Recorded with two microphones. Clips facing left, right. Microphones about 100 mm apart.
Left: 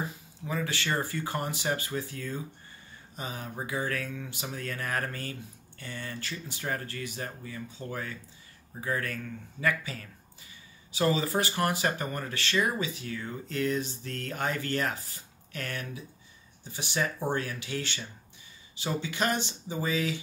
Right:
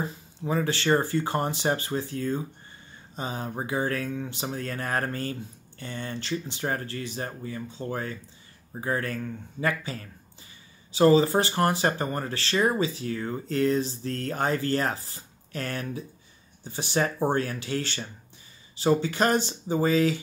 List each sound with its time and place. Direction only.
0.5 s speech: 35° right (ahead or behind)